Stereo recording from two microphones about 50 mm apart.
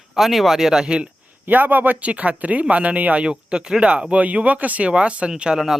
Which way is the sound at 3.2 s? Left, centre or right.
Centre.